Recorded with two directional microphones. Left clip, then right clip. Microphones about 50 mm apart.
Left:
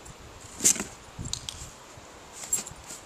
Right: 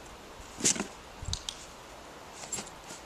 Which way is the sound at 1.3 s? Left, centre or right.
Right.